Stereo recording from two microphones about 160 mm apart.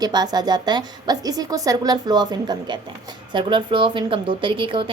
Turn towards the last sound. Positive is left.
turn(degrees=-30)  # may be behind; listen again after turning